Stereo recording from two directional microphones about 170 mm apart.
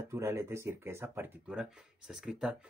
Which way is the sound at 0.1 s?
15° right (ahead or behind).